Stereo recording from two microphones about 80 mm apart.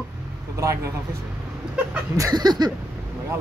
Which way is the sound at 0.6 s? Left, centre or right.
Right.